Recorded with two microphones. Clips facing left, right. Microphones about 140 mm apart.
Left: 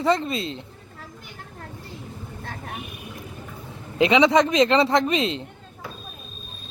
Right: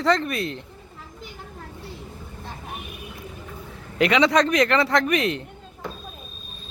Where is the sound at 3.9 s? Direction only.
20° left (ahead or behind).